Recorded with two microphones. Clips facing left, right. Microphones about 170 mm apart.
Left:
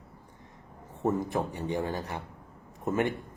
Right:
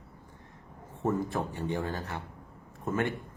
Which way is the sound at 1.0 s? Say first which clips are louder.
Left 2 dB; 20° left (ahead or behind).